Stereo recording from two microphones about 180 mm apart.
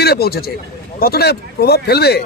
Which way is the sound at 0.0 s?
60° left (ahead or behind).